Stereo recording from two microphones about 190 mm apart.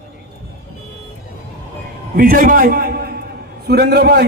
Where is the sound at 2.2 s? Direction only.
50° right (ahead or behind).